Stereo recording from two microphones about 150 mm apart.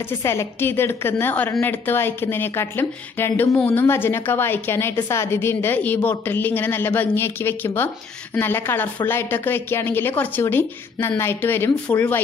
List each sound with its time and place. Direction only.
0.2 s a woman's voice: 20° left (ahead or behind)